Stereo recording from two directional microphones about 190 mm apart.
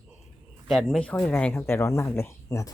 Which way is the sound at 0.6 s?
Centre (ahead or behind).